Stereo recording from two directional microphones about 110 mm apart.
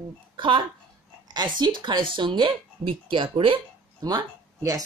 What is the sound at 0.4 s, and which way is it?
Speech, 50° right (ahead or behind).